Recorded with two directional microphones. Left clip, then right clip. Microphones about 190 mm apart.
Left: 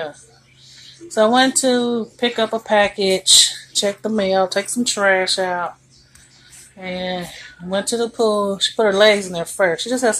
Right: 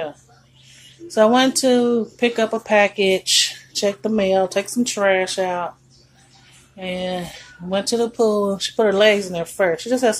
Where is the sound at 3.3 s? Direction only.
35° right (ahead or behind).